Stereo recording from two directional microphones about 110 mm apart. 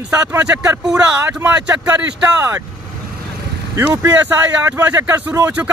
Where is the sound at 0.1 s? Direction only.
30° right (ahead or behind).